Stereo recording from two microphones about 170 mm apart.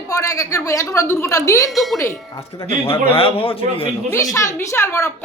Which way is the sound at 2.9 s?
30° left (ahead or behind).